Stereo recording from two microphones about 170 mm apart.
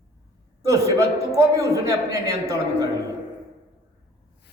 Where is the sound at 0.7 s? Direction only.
15° right (ahead or behind).